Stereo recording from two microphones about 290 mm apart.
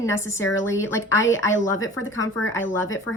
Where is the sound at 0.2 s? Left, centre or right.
Centre.